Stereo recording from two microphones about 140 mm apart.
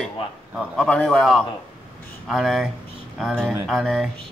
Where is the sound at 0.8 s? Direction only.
5° left (ahead or behind).